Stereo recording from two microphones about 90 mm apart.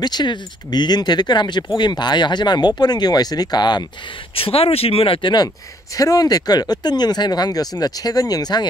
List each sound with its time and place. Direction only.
0.0 s speech: 50° left (ahead or behind)
4.4 s speech: 90° left
5.9 s speech: 45° left (ahead or behind)